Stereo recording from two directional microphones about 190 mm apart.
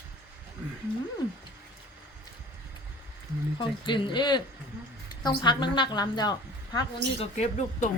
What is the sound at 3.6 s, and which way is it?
A woman's voice, 25° left (ahead or behind).